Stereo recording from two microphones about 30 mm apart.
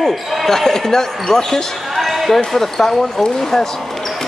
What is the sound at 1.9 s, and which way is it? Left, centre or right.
Basketball bounce, centre.